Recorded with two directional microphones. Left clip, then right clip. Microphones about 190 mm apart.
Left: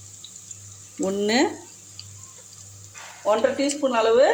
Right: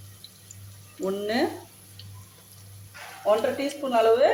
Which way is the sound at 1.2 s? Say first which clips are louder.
Left 5 dB; 45° left (ahead or behind).